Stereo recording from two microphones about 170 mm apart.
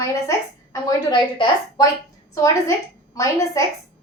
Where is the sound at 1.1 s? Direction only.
30° left (ahead or behind).